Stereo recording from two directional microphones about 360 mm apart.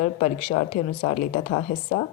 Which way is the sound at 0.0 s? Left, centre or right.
Centre.